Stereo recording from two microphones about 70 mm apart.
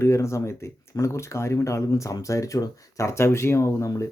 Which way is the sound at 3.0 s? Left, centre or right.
Left.